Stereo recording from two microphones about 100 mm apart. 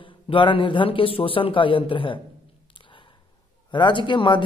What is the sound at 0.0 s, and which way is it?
Speech, 55° left (ahead or behind).